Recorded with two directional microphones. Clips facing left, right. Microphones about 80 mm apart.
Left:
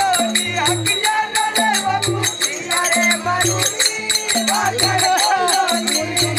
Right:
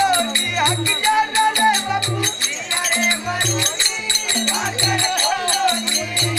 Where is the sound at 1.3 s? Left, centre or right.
Left.